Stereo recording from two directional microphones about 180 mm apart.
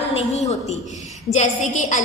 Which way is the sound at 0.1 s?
35° left (ahead or behind).